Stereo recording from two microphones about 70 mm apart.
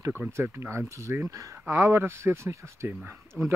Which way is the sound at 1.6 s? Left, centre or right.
Right.